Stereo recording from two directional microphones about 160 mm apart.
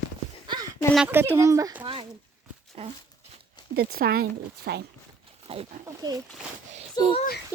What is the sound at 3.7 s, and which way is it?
Speech, 70° right (ahead or behind).